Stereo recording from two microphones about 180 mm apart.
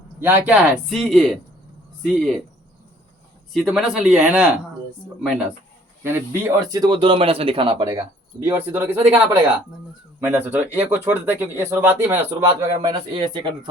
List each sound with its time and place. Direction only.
0.2 s speech: 10° right (ahead or behind)
3.5 s speech: centre (ahead or behind)
6.0 s speech: 15° right (ahead or behind)
7.9 s speech: 15° right (ahead or behind)